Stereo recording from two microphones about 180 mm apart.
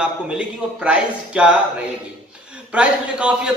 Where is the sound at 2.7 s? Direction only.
5° right (ahead or behind).